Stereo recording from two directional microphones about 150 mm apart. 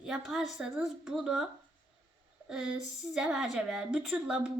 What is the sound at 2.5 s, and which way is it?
A woman's voice, 5° right (ahead or behind).